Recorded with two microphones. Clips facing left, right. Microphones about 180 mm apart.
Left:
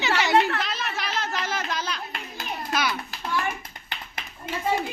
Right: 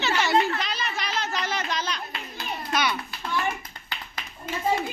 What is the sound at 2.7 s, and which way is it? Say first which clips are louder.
Children playing: right 1 dB; centre (ahead or behind).